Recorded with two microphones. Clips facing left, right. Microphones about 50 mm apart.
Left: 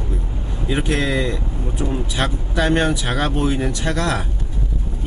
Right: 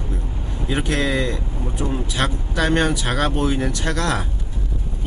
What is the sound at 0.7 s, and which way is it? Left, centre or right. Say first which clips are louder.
Speech: left 1 dB; centre.